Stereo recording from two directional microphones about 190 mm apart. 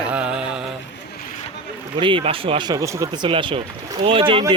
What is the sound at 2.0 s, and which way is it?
Speech, 25° right (ahead or behind).